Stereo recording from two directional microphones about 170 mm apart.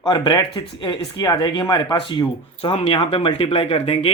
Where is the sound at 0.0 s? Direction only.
25° left (ahead or behind).